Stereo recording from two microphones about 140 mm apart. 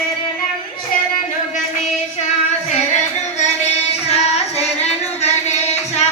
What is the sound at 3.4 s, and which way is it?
Music, 50° left (ahead or behind).